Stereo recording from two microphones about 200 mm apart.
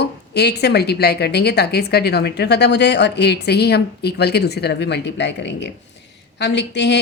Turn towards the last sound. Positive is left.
turn(degrees=60)  # may be behind; listen again after turning